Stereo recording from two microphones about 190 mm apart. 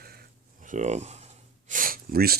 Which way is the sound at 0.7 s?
40° right (ahead or behind).